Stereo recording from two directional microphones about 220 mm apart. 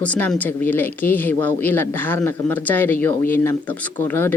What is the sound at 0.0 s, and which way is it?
Speech, 5° left (ahead or behind).